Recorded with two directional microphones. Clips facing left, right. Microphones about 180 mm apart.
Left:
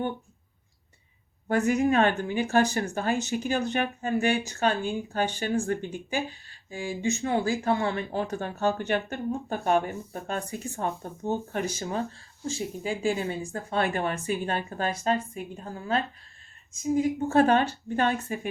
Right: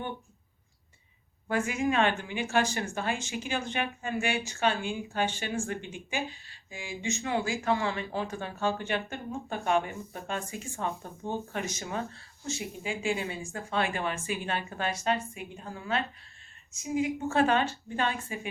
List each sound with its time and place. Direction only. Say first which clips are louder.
1.5 s a woman's voice: left 5 dB; 40° left (ahead or behind)